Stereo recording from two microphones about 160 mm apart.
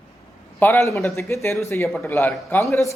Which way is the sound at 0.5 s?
15° left (ahead or behind).